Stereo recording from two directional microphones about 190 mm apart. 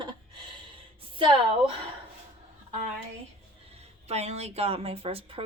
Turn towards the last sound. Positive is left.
turn(degrees=-30)  # may be behind; listen again after turning